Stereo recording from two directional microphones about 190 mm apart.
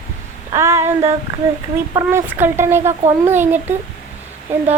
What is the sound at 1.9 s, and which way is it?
Speech, 10° right (ahead or behind).